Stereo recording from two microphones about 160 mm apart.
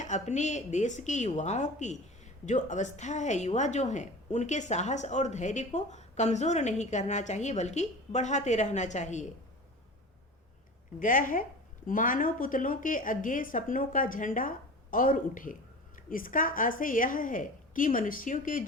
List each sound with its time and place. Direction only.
0.0 s a woman's voice: 50° left (ahead or behind)
11.0 s a woman's voice: 55° left (ahead or behind)